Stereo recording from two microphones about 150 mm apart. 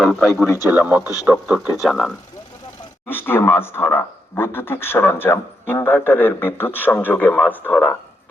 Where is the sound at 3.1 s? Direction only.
15° left (ahead or behind).